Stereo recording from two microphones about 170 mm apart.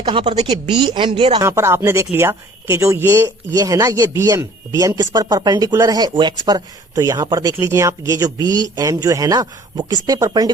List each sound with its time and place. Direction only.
0.0 s speech: 30° right (ahead or behind)
1.4 s speech: 15° right (ahead or behind)